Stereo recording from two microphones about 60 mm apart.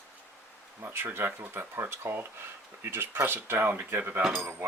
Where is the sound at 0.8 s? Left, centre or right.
Right.